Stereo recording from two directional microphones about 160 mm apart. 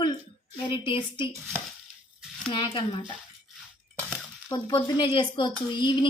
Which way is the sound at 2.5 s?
30° left (ahead or behind).